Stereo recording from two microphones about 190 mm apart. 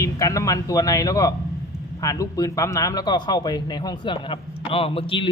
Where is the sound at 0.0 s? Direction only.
15° left (ahead or behind).